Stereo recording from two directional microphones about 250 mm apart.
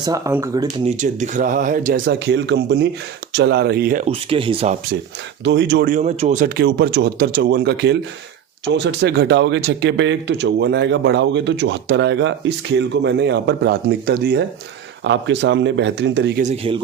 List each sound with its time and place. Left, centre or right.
0.0 s speech: centre
0.9 s speech: right
5.4 s speech: right
16.4 s speech: right